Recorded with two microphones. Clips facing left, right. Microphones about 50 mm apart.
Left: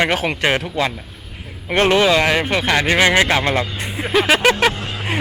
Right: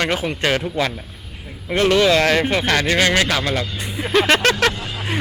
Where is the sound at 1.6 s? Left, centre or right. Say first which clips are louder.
Left 2 dB; left.